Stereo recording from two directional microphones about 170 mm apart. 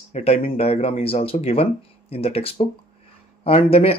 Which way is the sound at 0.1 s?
35° left (ahead or behind).